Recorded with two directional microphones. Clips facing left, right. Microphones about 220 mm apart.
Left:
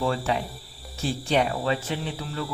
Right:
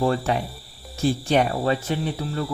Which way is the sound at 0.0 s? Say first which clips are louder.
Right 4 dB; 45° right (ahead or behind).